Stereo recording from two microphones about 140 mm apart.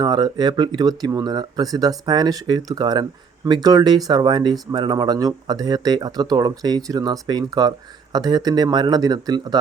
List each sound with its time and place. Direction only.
0.0 s speech: 30° right (ahead or behind)